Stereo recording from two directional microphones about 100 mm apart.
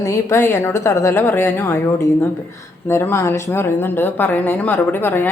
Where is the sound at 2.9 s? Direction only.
25° left (ahead or behind).